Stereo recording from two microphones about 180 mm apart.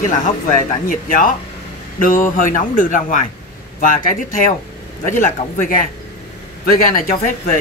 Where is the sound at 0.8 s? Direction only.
50° left (ahead or behind).